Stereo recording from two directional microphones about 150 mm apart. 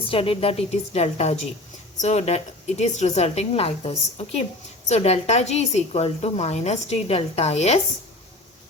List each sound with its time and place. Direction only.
0.1 s a woman's voice: 40° left (ahead or behind)